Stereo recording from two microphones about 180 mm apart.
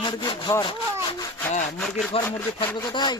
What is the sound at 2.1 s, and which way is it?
Speech, 30° left (ahead or behind).